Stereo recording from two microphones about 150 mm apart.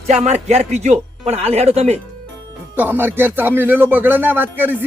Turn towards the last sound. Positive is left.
turn(degrees=-10)  # may be behind; listen again after turning